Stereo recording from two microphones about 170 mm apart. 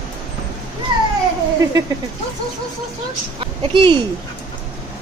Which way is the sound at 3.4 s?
30° right (ahead or behind).